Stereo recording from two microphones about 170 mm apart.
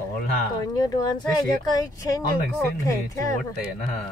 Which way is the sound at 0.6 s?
20° left (ahead or behind).